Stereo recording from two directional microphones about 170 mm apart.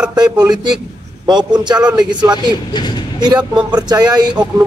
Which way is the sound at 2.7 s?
25° left (ahead or behind).